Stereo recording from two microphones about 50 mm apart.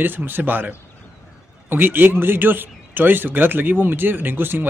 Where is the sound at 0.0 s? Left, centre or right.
Right.